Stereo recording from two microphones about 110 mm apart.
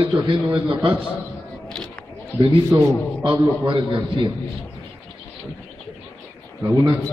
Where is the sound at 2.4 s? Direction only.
45° right (ahead or behind).